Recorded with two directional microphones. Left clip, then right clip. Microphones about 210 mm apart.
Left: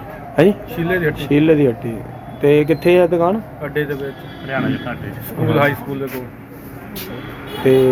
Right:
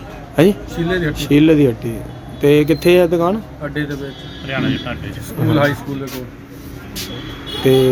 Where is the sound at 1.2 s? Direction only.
10° right (ahead or behind).